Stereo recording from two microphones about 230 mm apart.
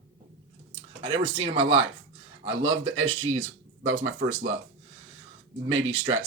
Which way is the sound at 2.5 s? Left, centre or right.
Right.